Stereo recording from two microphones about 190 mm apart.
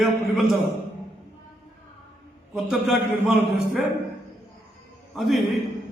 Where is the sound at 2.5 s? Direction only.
Centre (ahead or behind).